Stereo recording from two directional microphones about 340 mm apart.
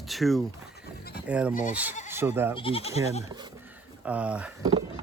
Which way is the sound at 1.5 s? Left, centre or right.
Left.